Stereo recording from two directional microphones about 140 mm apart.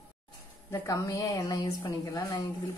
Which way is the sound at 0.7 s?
20° left (ahead or behind).